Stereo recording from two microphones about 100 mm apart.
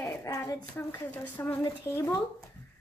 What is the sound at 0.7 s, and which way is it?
Speech, 25° left (ahead or behind).